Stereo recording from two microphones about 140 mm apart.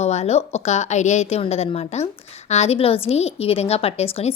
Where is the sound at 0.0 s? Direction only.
50° left (ahead or behind).